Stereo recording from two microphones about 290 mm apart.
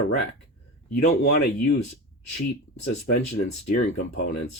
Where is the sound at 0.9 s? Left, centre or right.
Left.